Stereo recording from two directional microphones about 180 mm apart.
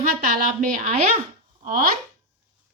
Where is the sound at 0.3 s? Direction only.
45° right (ahead or behind).